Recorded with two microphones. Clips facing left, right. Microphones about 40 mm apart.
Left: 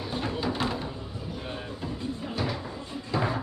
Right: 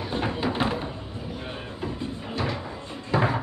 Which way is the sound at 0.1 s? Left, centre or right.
Right.